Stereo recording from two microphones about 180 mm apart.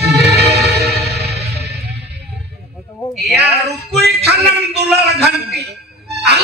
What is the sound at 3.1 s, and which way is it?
Music, centre (ahead or behind).